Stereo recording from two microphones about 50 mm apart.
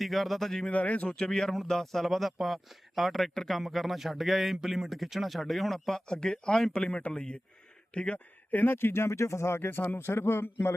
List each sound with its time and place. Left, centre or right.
0.0 s speech: centre
0.7 s speech: left
1.1 s speech: centre
6.1 s speech: centre
8.5 s speech: left
9.6 s speech: left